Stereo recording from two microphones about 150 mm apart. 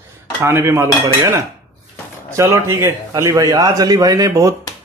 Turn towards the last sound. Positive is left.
turn(degrees=-25)  # may be behind; listen again after turning